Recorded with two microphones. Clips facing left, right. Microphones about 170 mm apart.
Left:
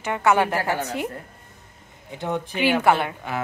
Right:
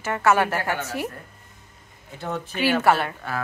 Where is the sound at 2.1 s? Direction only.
20° left (ahead or behind).